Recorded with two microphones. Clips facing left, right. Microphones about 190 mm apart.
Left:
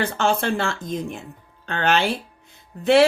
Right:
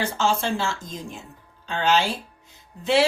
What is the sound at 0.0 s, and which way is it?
A woman's voice, 60° left (ahead or behind).